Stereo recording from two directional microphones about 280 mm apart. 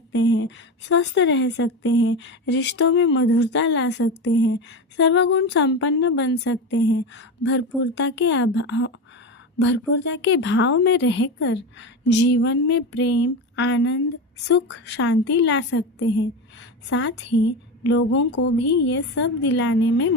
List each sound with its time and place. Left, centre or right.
0.2 s speech: left